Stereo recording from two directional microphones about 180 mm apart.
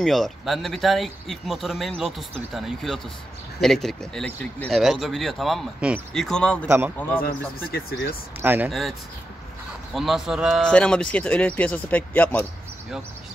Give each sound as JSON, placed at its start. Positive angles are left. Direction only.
{"t": 0.0, "sound": "speech", "side_deg": 0}
{"t": 7.2, "sound": "speech", "side_deg": 60}
{"t": 8.4, "sound": "speech", "side_deg": -10}
{"t": 8.6, "sound": "speech", "side_deg": 0}
{"t": 9.9, "sound": "speech", "side_deg": 0}